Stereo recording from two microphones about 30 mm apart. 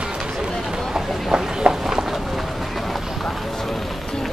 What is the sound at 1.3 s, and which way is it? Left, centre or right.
Run, right.